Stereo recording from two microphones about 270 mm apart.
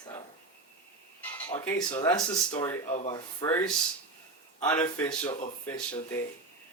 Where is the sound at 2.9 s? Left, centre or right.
Left.